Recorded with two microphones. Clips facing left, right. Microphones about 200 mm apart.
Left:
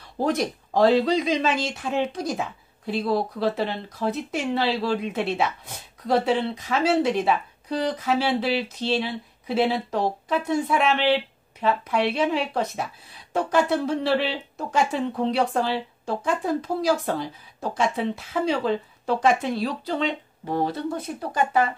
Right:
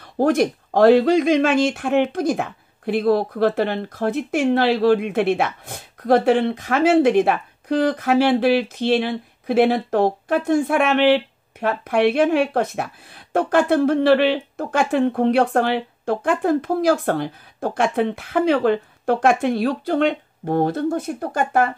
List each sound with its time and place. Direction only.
0.0 s speech: 55° right (ahead or behind)